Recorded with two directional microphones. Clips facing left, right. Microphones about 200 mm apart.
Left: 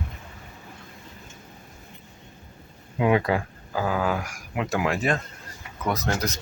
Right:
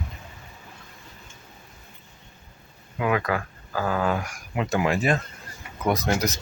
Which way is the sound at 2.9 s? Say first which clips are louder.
Left 3 dB; 25° left (ahead or behind).